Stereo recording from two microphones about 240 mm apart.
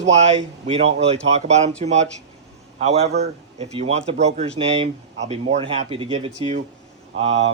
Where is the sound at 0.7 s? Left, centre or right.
Right.